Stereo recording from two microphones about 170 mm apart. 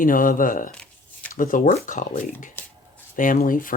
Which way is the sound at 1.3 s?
50° left (ahead or behind).